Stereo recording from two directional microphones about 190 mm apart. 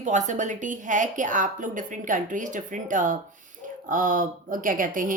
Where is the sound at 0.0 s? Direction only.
40° right (ahead or behind).